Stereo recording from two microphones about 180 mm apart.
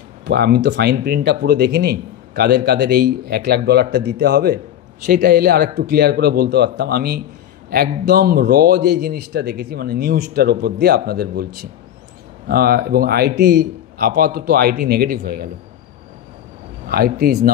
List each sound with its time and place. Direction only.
0.3 s a man's voice: 65° right (ahead or behind)
16.8 s a man's voice: 55° right (ahead or behind)